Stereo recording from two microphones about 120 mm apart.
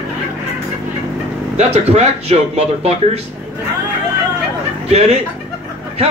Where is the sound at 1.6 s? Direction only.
65° right (ahead or behind).